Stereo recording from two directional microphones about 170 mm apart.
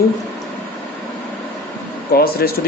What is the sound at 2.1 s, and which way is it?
Speech, 65° left (ahead or behind).